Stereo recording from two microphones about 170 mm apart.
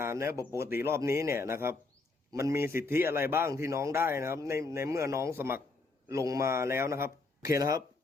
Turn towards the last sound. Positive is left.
turn(degrees=-20)  # may be behind; listen again after turning